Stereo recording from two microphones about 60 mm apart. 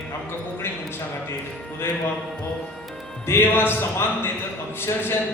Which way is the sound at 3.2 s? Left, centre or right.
Left.